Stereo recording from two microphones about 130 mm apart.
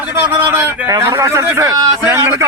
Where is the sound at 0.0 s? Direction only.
15° right (ahead or behind).